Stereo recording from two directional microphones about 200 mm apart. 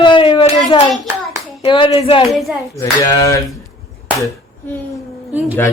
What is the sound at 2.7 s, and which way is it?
Speech, 15° left (ahead or behind).